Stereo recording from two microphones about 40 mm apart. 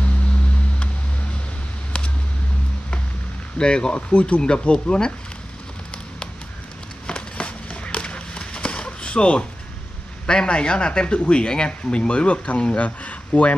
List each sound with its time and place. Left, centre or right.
3.5 s speech: left
4.4 s speech: centre
7.1 s a sound: left
10.2 s speech: left